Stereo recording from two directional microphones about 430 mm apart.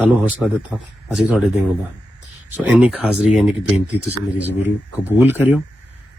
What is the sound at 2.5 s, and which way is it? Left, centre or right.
Speech, centre.